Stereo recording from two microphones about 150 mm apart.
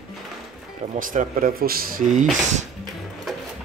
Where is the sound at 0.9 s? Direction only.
60° right (ahead or behind).